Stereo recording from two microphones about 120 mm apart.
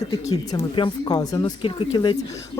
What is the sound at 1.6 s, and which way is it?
Speech, 45° left (ahead or behind).